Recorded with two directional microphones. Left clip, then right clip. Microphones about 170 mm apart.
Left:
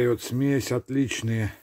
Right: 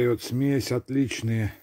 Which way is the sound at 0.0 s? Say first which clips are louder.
Even; 10° right (ahead or behind).